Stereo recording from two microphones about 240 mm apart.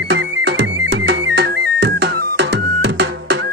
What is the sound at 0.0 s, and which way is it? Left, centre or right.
Music, right.